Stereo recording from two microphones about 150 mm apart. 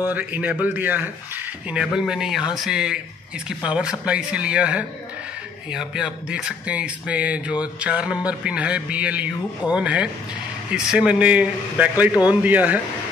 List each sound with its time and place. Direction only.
0.1 s speech: 10° right (ahead or behind)
12.1 s a man's voice: 25° left (ahead or behind)
12.4 s speech: 10° right (ahead or behind)